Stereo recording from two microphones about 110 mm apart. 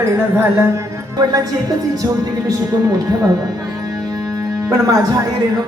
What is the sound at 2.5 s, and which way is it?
Speech, 35° right (ahead or behind).